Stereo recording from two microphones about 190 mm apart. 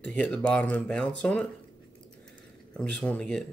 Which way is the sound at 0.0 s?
5° left (ahead or behind).